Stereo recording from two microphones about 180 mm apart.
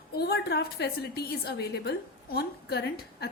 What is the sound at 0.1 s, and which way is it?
A woman's voice, 65° left (ahead or behind).